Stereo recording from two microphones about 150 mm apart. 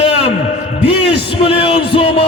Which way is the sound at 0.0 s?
40° left (ahead or behind).